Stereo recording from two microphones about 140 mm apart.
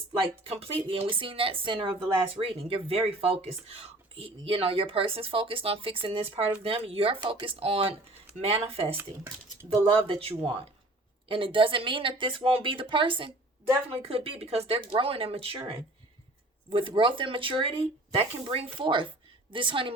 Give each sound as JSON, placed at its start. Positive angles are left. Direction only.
{"t": 0.4, "sound": "speech", "side_deg": -45}